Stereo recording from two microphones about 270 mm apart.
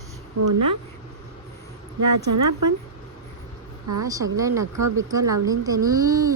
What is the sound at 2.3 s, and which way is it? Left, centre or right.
Speech, right.